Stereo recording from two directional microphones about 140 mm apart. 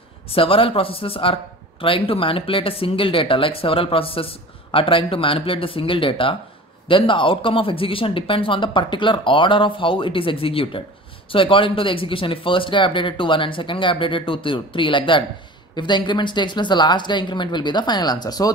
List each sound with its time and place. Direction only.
0.3 s speech: 40° left (ahead or behind)